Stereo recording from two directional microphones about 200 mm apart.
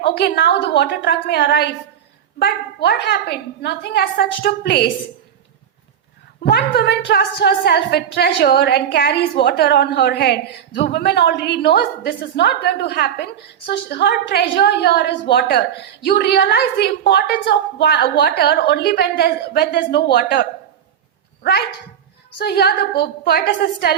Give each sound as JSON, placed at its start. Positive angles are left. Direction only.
{"t": 0.0, "sound": "a woman's voice", "side_deg": 55}
{"t": 6.4, "sound": "a woman's voice", "side_deg": 55}
{"t": 22.4, "sound": "a woman's voice", "side_deg": 55}